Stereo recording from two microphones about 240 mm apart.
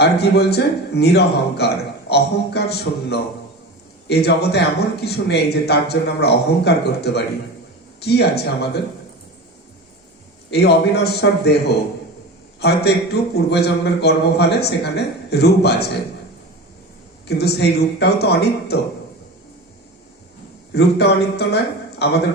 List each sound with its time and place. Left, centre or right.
0.0 s a man's voice: left
10.5 s a man's voice: left
17.2 s a man's voice: left
20.7 s a man's voice: left